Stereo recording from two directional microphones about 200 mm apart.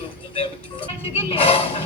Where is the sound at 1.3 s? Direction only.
30° left (ahead or behind).